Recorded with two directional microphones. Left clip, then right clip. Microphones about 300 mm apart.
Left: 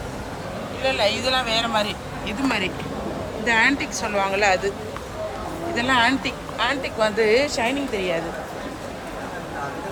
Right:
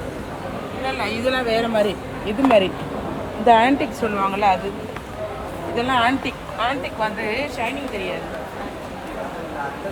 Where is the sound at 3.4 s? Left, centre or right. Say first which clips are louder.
Right 5 dB; centre.